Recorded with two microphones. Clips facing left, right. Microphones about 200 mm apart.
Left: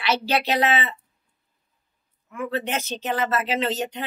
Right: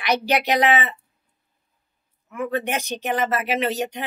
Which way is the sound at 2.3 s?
15° right (ahead or behind).